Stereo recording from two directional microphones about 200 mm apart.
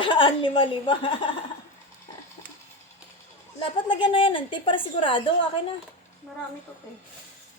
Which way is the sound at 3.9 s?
25° left (ahead or behind).